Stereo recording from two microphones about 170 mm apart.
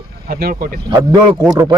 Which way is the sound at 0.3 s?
60° right (ahead or behind).